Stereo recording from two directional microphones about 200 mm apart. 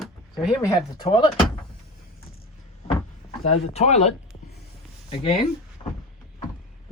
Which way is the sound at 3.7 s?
30° left (ahead or behind).